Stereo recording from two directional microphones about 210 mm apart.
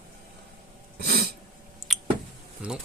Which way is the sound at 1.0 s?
50° right (ahead or behind).